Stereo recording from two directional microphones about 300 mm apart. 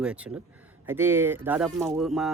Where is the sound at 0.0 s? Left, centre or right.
Centre.